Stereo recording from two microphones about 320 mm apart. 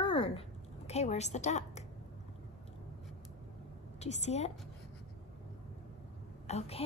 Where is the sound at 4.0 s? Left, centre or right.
Left.